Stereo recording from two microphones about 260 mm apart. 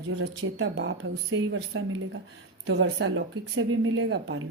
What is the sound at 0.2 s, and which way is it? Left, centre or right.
Speech, right.